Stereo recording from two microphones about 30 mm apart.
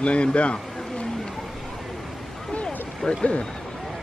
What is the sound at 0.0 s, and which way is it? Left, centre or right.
A man's voice, left.